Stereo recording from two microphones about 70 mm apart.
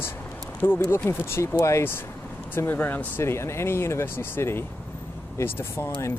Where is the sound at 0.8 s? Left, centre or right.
Left.